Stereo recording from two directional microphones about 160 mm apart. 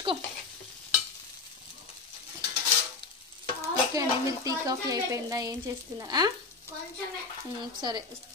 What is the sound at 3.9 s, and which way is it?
Speech, 20° right (ahead or behind).